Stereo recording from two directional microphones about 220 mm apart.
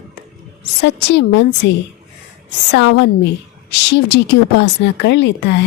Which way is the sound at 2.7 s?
55° left (ahead or behind).